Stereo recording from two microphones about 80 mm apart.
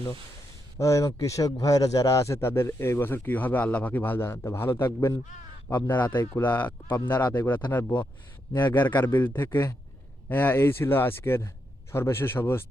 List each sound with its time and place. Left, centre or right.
0.8 s a man's voice: left